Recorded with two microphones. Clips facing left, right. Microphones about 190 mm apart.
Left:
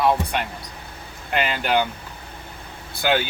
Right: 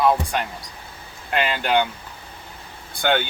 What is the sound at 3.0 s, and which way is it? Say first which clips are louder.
Speech: even; 5° left (ahead or behind).